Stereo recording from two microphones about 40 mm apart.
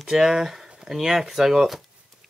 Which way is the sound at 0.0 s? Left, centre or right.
Centre.